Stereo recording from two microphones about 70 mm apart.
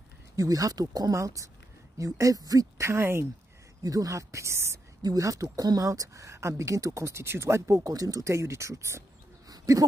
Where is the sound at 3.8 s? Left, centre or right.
Right.